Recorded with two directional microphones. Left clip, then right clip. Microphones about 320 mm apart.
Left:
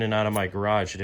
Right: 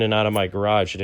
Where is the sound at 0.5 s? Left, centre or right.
Centre.